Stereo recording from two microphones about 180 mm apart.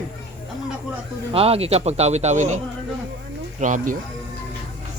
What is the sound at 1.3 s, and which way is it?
Speech, 35° right (ahead or behind).